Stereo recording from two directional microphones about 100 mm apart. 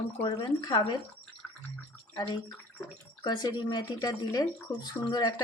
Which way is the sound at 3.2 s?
45° left (ahead or behind).